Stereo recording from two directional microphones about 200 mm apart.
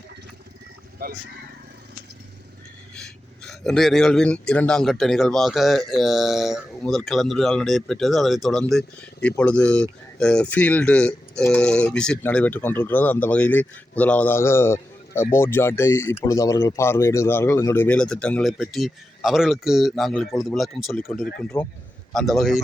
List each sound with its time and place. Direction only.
1.0 s speech: 50° right (ahead or behind)
2.9 s speech: centre (ahead or behind)